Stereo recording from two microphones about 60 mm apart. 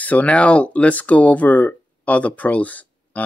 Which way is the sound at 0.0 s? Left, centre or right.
Left.